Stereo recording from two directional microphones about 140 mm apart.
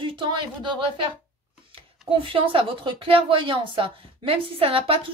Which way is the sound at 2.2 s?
40° right (ahead or behind).